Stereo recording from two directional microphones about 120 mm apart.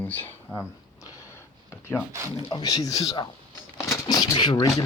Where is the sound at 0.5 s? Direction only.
15° left (ahead or behind).